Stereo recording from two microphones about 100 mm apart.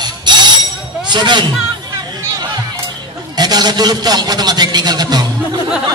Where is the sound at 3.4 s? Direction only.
45° right (ahead or behind).